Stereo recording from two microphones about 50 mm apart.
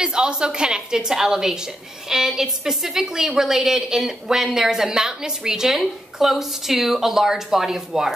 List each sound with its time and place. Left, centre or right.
0.0 s a woman's voice: centre